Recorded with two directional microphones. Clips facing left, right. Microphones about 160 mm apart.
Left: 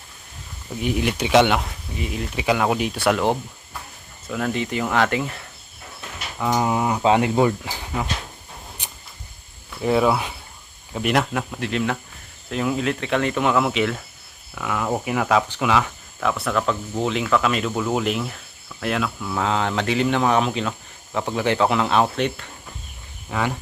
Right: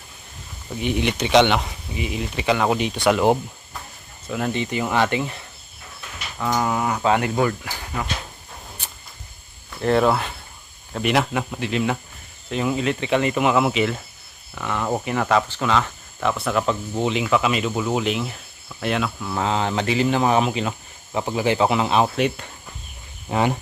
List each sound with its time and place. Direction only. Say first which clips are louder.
0.8 s speech: even; 5° left (ahead or behind)
6.4 s speech: left 1 dB; 15° left (ahead or behind)
9.6 s speech: right 1 dB; 5° left (ahead or behind)
16.3 s speech: right 1 dB; 5° right (ahead or behind)
23.3 s speech: right 4 dB; 20° right (ahead or behind)